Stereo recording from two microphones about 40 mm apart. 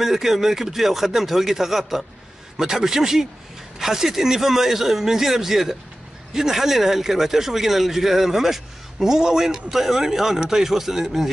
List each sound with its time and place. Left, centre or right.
0.0 s speech: centre